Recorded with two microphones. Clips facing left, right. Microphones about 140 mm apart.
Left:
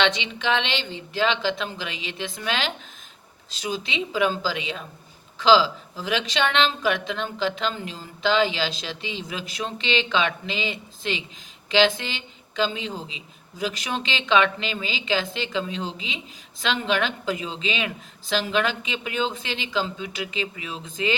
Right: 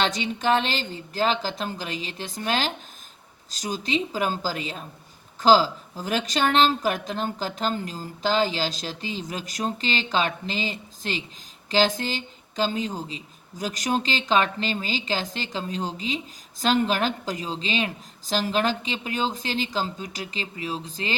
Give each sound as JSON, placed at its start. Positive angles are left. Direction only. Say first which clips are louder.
{"t": 0.0, "sound": "speech", "louder": "left 1 dB", "side_deg": -45}